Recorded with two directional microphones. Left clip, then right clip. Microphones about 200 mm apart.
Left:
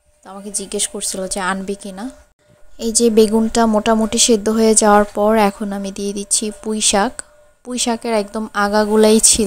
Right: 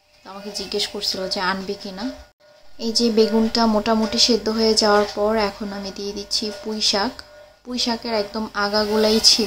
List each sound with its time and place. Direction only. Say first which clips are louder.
0.3 s a woman's voice: left 1 dB; 40° left (ahead or behind)